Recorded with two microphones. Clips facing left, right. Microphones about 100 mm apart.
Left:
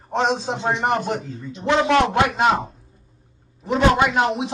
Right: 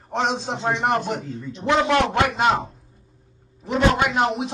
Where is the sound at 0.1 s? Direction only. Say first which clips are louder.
Left 2 dB; centre (ahead or behind).